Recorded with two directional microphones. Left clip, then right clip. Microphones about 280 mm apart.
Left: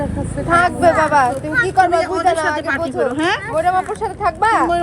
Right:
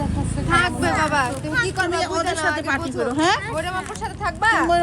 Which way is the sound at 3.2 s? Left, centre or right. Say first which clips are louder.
Right 3 dB; right.